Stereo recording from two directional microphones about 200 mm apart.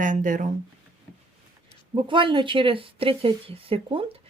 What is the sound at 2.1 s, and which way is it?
Speech, 25° right (ahead or behind).